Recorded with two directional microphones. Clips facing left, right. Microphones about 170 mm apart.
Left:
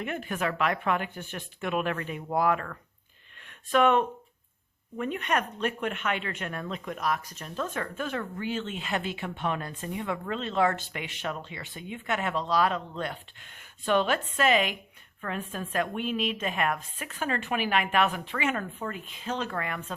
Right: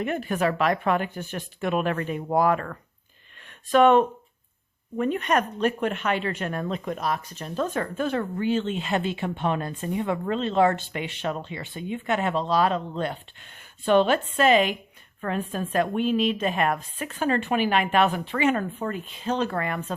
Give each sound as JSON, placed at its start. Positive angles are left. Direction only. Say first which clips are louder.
{"t": 0.0, "sound": "speech", "louder": "right 6 dB", "side_deg": -35}